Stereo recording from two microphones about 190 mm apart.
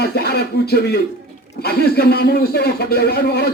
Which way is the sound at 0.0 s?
55° left (ahead or behind).